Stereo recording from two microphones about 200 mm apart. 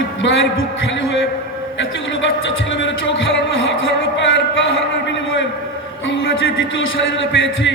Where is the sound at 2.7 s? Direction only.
65° left (ahead or behind).